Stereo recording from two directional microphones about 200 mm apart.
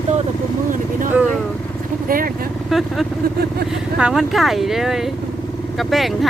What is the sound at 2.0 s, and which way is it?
Speech, 45° right (ahead or behind).